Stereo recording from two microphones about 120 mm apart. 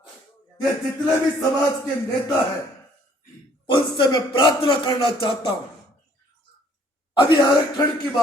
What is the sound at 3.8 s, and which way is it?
A man's voice, 45° left (ahead or behind).